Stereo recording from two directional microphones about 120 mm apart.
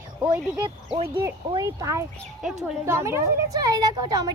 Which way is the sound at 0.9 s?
50° right (ahead or behind).